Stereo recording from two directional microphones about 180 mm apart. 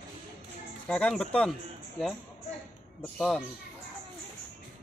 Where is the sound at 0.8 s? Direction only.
5° left (ahead or behind).